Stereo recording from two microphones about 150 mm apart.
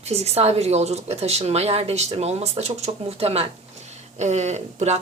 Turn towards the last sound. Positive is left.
turn(degrees=-50)  # may be behind; listen again after turning